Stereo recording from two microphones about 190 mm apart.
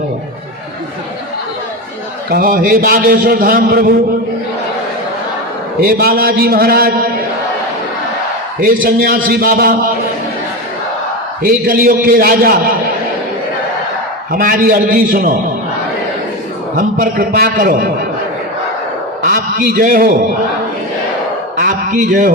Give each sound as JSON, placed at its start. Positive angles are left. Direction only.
{"t": 2.3, "sound": "a man's voice", "side_deg": -50}
{"t": 5.8, "sound": "a man's voice", "side_deg": -50}
{"t": 8.6, "sound": "a man's voice", "side_deg": -50}
{"t": 11.4, "sound": "a man's voice", "side_deg": -50}
{"t": 14.3, "sound": "a man's voice", "side_deg": -45}
{"t": 16.7, "sound": "a man's voice", "side_deg": -50}
{"t": 19.2, "sound": "a man's voice", "side_deg": -50}
{"t": 21.6, "sound": "a sound", "side_deg": -45}